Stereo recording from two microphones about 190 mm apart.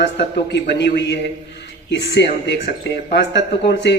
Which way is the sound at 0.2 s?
60° left (ahead or behind).